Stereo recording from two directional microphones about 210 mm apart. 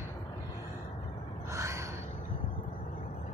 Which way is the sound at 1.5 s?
15° right (ahead or behind).